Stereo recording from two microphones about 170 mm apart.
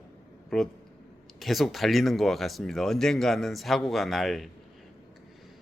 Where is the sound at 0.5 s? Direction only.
Centre (ahead or behind).